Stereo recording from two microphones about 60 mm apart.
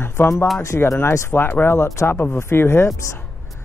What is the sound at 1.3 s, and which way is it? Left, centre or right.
Speech, left.